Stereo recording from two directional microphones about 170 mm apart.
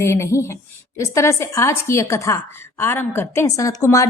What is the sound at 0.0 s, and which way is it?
A woman's voice, 15° left (ahead or behind).